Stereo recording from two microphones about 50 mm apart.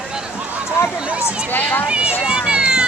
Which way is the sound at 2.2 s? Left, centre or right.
Centre.